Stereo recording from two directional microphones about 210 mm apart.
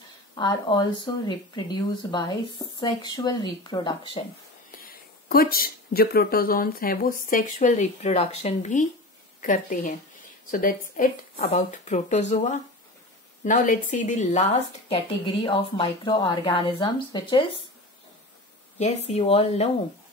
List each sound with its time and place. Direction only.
0.4 s speech: 20° left (ahead or behind)
4.6 s speech: 45° left (ahead or behind); by 17.5 s 20° left (ahead or behind)
18.8 s speech: 30° left (ahead or behind)